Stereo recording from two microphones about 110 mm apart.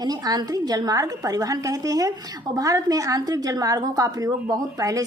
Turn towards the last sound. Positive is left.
turn(degrees=-30)  # may be behind; listen again after turning